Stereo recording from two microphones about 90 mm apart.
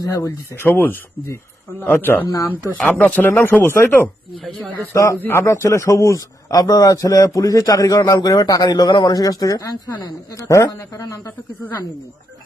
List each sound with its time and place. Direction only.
0.0 s speech: 40° left (ahead or behind); by 2.2 s 25° left (ahead or behind)
2.2 s a man's voice: 40° left (ahead or behind)
3.0 s a man's voice: 20° left (ahead or behind); by 10.4 s 45° left (ahead or behind)
10.5 s a man's voice: 35° left (ahead or behind)